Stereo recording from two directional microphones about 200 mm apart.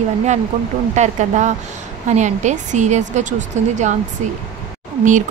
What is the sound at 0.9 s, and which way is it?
Speech, 35° right (ahead or behind).